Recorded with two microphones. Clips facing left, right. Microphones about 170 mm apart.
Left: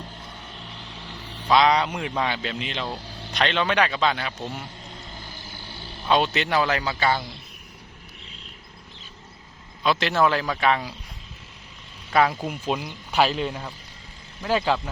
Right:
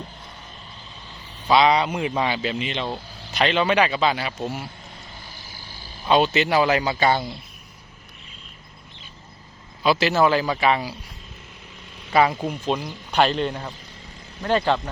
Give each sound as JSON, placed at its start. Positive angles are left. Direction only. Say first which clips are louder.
{"t": 0.8, "sound": "vehicle", "louder": "left 3 dB", "side_deg": 75}
{"t": 1.5, "sound": "speech", "louder": "right 2 dB", "side_deg": 0}
{"t": 6.1, "sound": "speech", "louder": "right 3 dB", "side_deg": 0}
{"t": 9.8, "sound": "speech", "louder": "right 3 dB", "side_deg": -5}
{"t": 12.1, "sound": "speech", "louder": "right 2 dB", "side_deg": 0}